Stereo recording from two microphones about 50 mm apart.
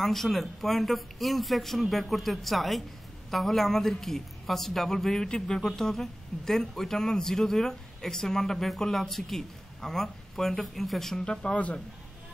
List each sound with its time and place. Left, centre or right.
0.0 s a man's voice: centre
11.5 s a man's voice: left